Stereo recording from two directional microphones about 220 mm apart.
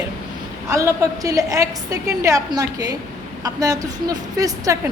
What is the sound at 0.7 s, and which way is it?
A woman's voice, 15° right (ahead or behind).